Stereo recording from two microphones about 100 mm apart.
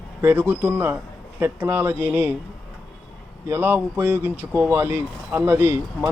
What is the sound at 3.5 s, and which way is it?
Speech, 20° right (ahead or behind).